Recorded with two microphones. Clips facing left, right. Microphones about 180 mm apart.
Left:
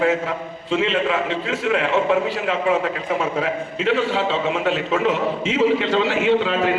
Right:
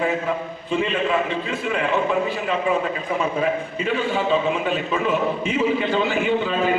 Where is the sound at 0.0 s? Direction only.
80° left.